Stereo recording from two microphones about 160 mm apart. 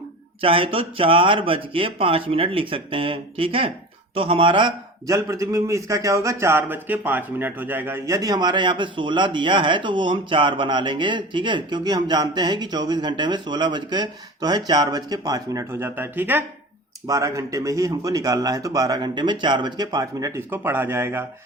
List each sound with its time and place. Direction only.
0.4 s speech: 35° right (ahead or behind)
5.0 s a man's voice: 20° right (ahead or behind)